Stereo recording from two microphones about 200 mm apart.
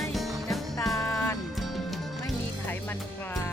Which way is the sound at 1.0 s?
15° left (ahead or behind).